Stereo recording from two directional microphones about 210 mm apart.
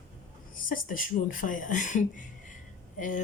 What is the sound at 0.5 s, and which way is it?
Speech, 40° left (ahead or behind).